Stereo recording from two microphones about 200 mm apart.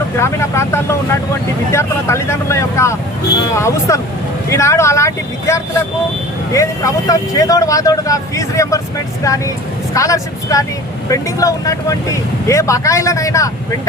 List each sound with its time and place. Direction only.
0.2 s speech: 15° left (ahead or behind)
9.9 s speech: 15° left (ahead or behind)